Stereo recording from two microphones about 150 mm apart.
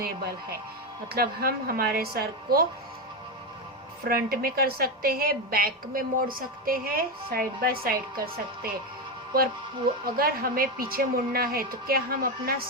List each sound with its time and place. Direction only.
1.1 s a woman's voice: 90° right
4.0 s a woman's voice: 85° right
10.2 s a woman's voice: 80° right